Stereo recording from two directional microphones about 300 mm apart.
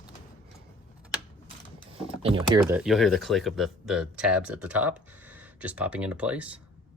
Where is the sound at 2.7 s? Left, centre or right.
Centre.